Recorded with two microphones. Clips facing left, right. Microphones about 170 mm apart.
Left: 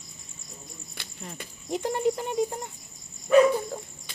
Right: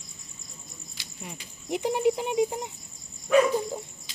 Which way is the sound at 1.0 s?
60° left (ahead or behind).